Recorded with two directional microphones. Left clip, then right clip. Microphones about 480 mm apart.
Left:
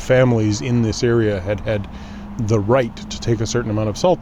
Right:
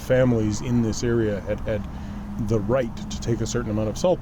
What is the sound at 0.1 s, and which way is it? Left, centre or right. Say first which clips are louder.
Speech: left 5 dB; left.